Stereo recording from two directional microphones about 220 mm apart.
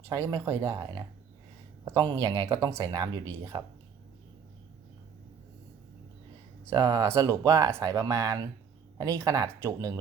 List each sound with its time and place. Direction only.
0.1 s speech: 15° right (ahead or behind)
6.7 s speech: 15° right (ahead or behind)